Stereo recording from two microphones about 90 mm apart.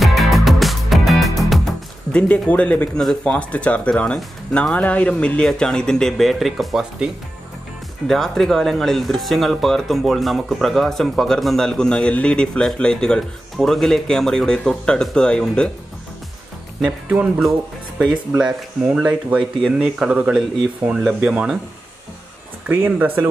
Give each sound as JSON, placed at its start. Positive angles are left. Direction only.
{"t": 0.0, "sound": "music", "side_deg": 0}
{"t": 2.1, "sound": "speech", "side_deg": 15}
{"t": 8.1, "sound": "speech", "side_deg": 5}
{"t": 18.3, "sound": "speech", "side_deg": -10}
{"t": 22.7, "sound": "speech", "side_deg": -20}